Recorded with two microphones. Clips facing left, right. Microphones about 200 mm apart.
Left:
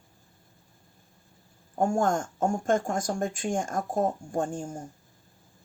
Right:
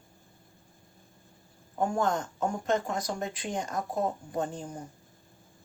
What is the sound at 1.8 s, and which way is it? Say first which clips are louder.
Speech: left 3 dB; 45° left (ahead or behind).